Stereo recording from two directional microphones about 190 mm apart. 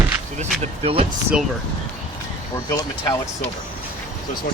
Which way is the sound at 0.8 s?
30° right (ahead or behind).